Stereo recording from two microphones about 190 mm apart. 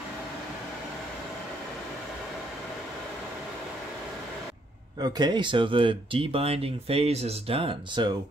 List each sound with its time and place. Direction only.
5.0 s speech: 20° right (ahead or behind)